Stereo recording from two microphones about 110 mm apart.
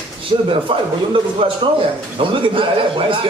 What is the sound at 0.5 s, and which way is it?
A man's voice, 55° right (ahead or behind).